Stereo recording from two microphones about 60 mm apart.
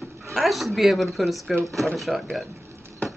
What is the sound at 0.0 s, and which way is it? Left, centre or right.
Speech, centre.